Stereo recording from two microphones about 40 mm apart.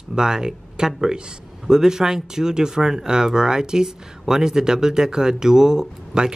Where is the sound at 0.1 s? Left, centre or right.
Centre.